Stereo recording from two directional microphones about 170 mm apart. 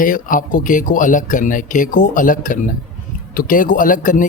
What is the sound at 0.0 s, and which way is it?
Speech, 50° left (ahead or behind).